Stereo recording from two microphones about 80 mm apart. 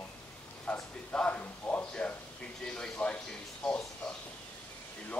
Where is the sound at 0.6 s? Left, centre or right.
Centre.